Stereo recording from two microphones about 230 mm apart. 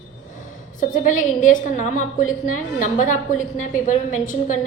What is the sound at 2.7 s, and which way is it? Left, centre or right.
A woman's voice, left.